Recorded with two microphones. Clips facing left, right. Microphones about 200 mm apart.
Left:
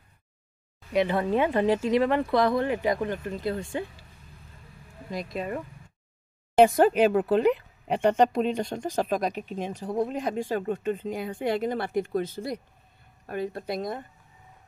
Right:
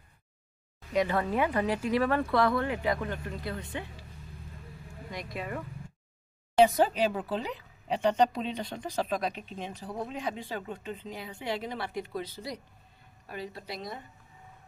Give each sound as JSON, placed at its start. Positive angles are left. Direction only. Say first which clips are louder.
{"t": 0.9, "sound": "speech", "louder": "left 4 dB", "side_deg": 25}
{"t": 5.1, "sound": "speech", "louder": "left 6 dB", "side_deg": 25}
{"t": 6.6, "sound": "speech", "louder": "left 5 dB", "side_deg": 55}